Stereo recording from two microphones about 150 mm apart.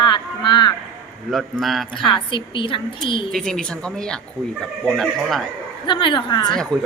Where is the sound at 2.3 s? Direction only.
35° left (ahead or behind).